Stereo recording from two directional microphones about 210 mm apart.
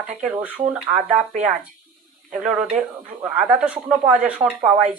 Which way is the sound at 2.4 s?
5° right (ahead or behind).